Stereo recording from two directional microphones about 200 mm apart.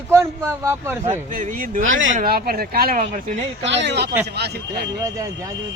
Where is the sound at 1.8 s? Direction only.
80° right.